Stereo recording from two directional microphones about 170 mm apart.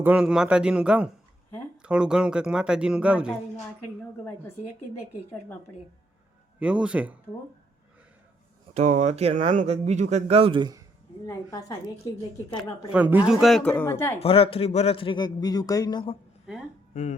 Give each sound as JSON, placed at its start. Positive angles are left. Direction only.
{"t": 0.0, "sound": "speech", "side_deg": -5}
{"t": 4.2, "sound": "a woman's voice", "side_deg": 15}
{"t": 6.6, "sound": "speech", "side_deg": -5}
{"t": 8.7, "sound": "speech", "side_deg": -45}
{"t": 11.3, "sound": "a woman's voice", "side_deg": 20}
{"t": 12.9, "sound": "speech", "side_deg": -10}
{"t": 14.2, "sound": "a man's voice", "side_deg": 35}
{"t": 16.5, "sound": "speech", "side_deg": -5}
{"t": 16.9, "sound": "speech", "side_deg": 45}